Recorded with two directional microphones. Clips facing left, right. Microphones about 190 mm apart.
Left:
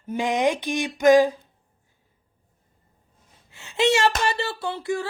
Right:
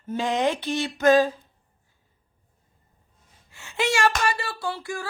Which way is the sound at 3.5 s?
20° left (ahead or behind).